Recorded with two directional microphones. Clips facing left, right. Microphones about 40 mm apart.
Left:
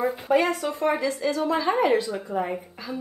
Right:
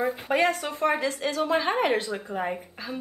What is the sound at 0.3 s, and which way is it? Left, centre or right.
Speech, right.